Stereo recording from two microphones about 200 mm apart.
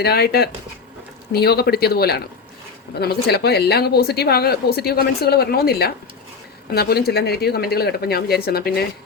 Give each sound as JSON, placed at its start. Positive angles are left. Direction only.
{"t": 0.0, "sound": "speech", "side_deg": 50}